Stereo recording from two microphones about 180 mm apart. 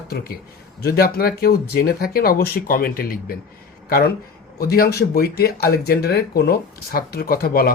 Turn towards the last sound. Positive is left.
turn(degrees=55)  # may be behind; listen again after turning